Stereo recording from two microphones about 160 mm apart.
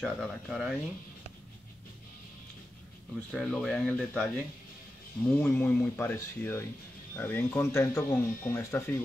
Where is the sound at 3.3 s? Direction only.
Centre (ahead or behind).